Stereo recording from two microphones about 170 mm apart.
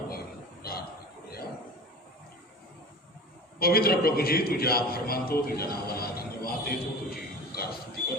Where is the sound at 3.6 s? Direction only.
65° left (ahead or behind).